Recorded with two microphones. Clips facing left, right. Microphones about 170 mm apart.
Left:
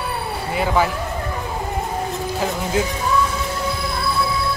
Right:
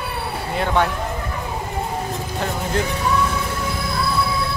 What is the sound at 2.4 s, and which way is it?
Speech, 5° left (ahead or behind).